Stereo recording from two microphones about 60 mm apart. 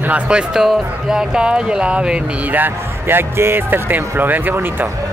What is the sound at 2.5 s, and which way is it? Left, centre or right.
Speech, right.